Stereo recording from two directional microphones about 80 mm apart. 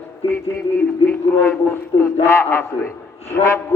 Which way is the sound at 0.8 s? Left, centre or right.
Left.